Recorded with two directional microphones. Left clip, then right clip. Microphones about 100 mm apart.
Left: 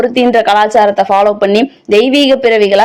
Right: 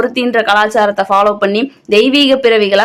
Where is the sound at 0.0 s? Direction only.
40° left (ahead or behind).